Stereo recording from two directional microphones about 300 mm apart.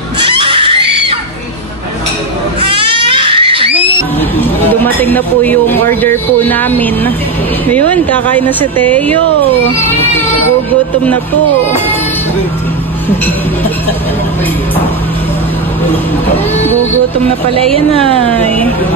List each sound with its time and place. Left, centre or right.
0.2 s screaming: centre
2.6 s crying: centre
4.4 s speech: centre
17.7 s speech: centre